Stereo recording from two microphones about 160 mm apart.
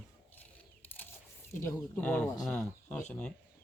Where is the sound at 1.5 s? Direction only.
15° left (ahead or behind).